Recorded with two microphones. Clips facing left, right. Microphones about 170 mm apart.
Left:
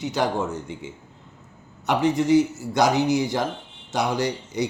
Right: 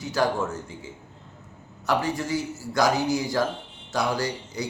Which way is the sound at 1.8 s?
20° left (ahead or behind).